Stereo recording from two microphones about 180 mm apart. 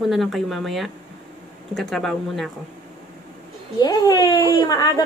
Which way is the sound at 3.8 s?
25° left (ahead or behind).